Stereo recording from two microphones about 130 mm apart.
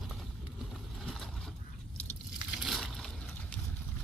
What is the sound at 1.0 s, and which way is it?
Boat, centre (ahead or behind).